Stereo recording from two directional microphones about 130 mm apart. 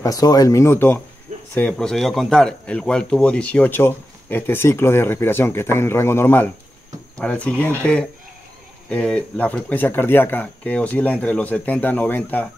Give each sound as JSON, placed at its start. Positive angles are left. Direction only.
{"t": 0.0, "sound": "speech", "side_deg": 25}